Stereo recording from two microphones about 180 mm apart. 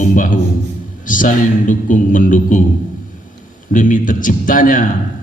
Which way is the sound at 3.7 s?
50° left (ahead or behind).